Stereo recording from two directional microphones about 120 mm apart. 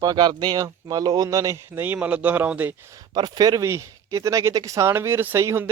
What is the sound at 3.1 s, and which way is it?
Speech, 35° right (ahead or behind).